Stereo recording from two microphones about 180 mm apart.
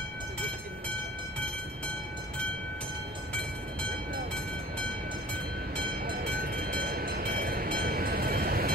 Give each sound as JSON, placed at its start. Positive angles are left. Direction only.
{"t": 6.0, "sound": "train", "side_deg": -55}